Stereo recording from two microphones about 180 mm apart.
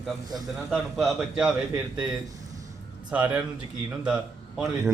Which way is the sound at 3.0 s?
5° right (ahead or behind).